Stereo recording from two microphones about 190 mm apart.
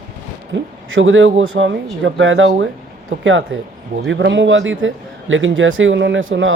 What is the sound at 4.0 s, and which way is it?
A man's voice, 70° right (ahead or behind).